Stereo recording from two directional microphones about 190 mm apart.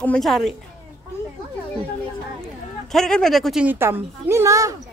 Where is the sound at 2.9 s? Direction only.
5° left (ahead or behind).